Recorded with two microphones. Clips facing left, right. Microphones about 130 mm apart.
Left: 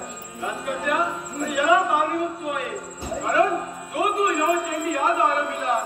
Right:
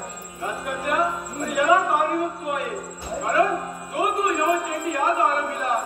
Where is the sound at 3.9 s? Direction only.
40° right (ahead or behind).